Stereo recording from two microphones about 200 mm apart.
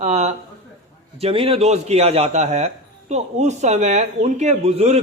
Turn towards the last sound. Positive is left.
turn(degrees=-30)  # may be behind; listen again after turning